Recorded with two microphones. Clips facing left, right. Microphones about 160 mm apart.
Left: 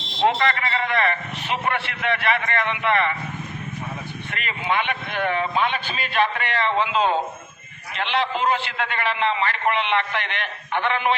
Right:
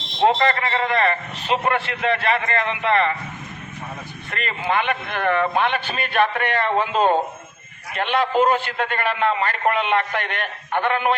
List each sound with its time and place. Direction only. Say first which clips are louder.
0.3 s a man's voice: right 2 dB; 35° right (ahead or behind)
4.3 s a man's voice: right 2 dB; 40° right (ahead or behind)